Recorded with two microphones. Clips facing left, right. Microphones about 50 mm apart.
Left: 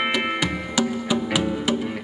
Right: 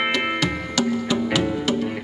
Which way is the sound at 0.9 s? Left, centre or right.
Centre.